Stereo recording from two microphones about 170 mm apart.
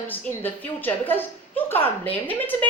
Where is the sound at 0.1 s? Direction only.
10° left (ahead or behind).